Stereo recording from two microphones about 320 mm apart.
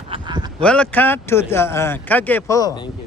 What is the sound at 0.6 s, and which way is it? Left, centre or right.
Speech, centre.